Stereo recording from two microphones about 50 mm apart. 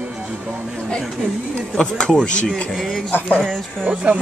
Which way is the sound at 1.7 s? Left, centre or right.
Centre.